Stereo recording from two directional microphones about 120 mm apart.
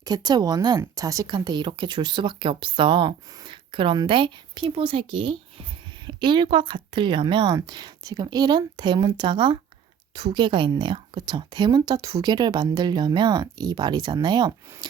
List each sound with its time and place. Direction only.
0.0 s speech: 35° right (ahead or behind)